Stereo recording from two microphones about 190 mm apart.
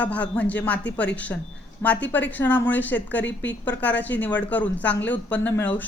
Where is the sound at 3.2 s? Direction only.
70° left (ahead or behind).